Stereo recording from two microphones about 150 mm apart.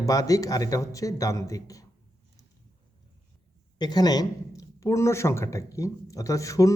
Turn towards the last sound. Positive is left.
turn(degrees=20)  # may be behind; listen again after turning